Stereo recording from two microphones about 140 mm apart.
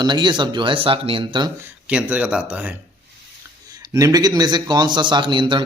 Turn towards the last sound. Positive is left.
turn(degrees=-35)  # may be behind; listen again after turning